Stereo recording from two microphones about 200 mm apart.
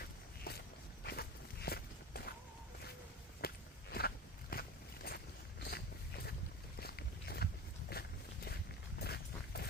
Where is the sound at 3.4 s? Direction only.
50° left (ahead or behind).